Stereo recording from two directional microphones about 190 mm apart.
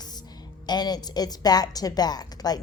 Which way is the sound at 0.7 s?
20° left (ahead or behind).